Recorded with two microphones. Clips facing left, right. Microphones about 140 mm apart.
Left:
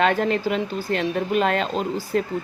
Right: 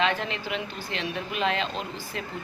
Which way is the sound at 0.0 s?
45° left (ahead or behind).